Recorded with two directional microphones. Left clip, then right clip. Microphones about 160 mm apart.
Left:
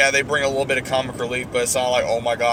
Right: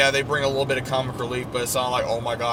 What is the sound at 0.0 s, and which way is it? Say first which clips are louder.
Speech: left 3 dB; 25° right (ahead or behind).